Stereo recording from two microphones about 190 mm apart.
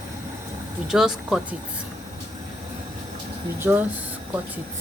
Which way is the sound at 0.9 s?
5° right (ahead or behind).